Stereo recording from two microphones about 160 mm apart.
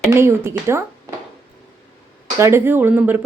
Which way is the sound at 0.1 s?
15° right (ahead or behind).